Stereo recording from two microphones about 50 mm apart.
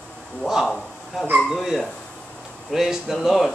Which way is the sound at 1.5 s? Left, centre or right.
Centre.